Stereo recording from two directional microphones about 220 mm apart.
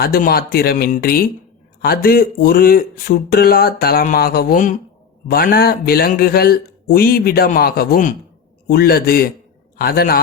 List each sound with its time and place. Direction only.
0.0 s speech: 45° left (ahead or behind)